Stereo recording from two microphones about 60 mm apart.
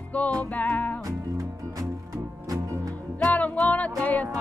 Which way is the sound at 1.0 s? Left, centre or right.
Right.